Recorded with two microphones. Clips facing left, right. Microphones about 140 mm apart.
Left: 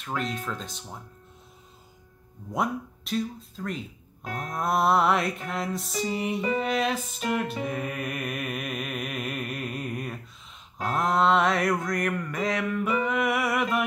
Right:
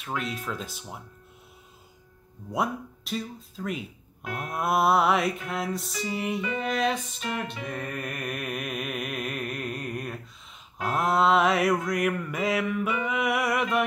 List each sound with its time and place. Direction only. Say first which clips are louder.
0.0 s mantra: left 1 dB; 5° right (ahead or behind)
2.5 s mantra: even; centre (ahead or behind)
6.3 s music: left 3 dB; 35° left (ahead or behind)
6.6 s mantra: even; centre (ahead or behind)